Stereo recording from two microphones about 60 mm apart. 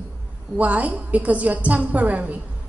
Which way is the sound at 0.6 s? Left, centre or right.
Right.